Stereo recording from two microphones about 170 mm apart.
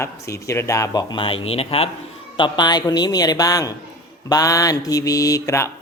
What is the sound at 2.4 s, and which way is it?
Mantra, 25° left (ahead or behind).